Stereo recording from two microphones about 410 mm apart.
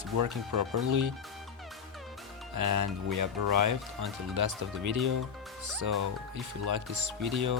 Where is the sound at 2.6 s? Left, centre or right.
Right.